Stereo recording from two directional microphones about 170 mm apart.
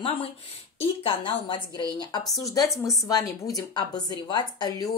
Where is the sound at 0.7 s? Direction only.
30° left (ahead or behind).